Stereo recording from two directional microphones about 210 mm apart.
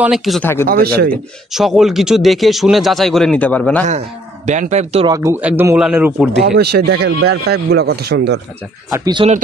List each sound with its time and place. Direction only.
0.0 s a man's voice: centre (ahead or behind)
0.7 s speech: 45° right (ahead or behind)
1.5 s a man's voice: centre (ahead or behind)
4.5 s speech: 35° right (ahead or behind)
5.0 s speech: 15° right (ahead or behind)
6.4 s speech: 50° right (ahead or behind)
8.9 s speech: 20° right (ahead or behind)